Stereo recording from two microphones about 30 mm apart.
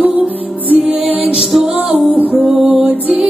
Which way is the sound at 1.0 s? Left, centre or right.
Right.